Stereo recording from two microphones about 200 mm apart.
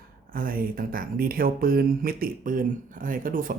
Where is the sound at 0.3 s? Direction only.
45° right (ahead or behind).